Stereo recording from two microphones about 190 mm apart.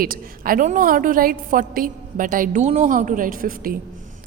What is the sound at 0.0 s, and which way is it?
A woman's voice, 50° right (ahead or behind).